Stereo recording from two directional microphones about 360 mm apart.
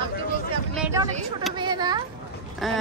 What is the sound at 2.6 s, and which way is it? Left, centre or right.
Speech, centre.